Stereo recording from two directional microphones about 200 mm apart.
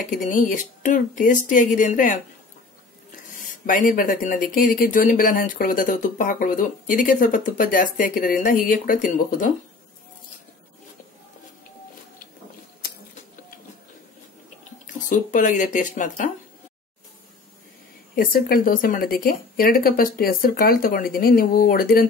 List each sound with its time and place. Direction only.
0.1 s speech: 40° left (ahead or behind)
3.3 s speech: 40° left (ahead or behind)
14.9 s speech: 40° left (ahead or behind)
18.1 s speech: 45° left (ahead or behind)